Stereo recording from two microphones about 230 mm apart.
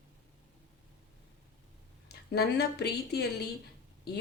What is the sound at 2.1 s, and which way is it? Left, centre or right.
A woman's voice, left.